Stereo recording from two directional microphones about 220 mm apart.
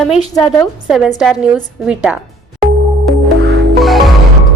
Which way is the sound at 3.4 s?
50° right (ahead or behind).